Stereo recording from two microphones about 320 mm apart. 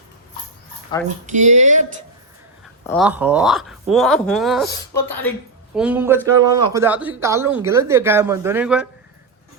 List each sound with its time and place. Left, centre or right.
1.0 s speech: right
2.8 s speech: centre